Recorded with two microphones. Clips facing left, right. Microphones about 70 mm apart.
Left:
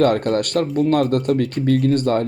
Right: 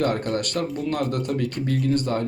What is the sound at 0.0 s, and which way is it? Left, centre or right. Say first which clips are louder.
Speech: left 7 dB; left.